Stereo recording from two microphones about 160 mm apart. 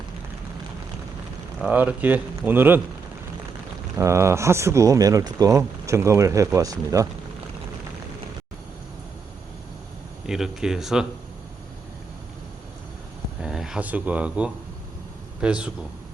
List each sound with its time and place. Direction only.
1.6 s speech: 10° right (ahead or behind)
3.9 s speech: 15° right (ahead or behind)
10.2 s speech: 5° right (ahead or behind)
13.4 s speech: 5° right (ahead or behind)